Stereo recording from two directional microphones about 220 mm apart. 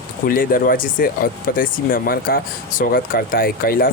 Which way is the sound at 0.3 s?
40° left (ahead or behind).